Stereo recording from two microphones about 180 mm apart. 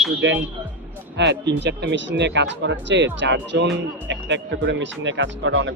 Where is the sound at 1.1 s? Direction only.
75° right (ahead or behind).